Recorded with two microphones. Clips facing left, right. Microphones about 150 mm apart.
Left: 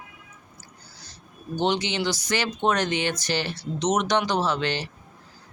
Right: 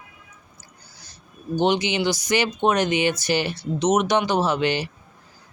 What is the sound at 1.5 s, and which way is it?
Speech, 15° right (ahead or behind).